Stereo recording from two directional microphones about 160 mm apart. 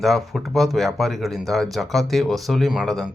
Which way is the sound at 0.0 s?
Centre (ahead or behind).